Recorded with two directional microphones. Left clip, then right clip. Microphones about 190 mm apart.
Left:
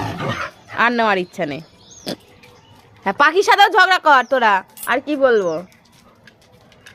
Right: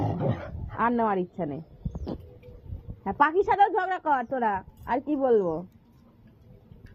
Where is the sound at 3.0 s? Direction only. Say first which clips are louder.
Left 9 dB; 70° left (ahead or behind); by 4.7 s 45° left (ahead or behind).